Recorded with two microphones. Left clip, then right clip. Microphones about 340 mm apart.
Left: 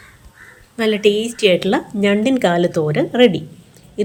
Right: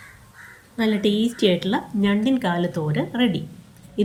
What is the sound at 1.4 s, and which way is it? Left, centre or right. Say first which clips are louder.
Speech: left 7 dB; left.